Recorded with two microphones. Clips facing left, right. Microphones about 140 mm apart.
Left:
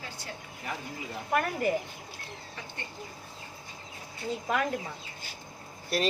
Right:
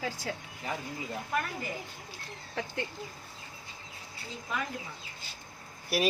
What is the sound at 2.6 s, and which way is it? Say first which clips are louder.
Speech: right 11 dB; 90° right.